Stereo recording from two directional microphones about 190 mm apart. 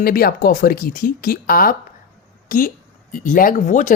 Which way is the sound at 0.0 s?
50° left (ahead or behind).